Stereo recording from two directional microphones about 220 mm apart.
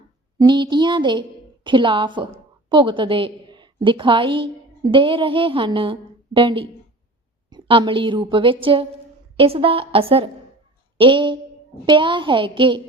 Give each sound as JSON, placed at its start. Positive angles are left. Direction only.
{"t": 0.3, "sound": "a woman's voice", "side_deg": -20}